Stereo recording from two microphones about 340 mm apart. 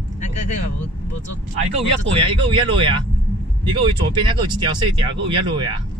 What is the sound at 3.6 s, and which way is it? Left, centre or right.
Speech, centre.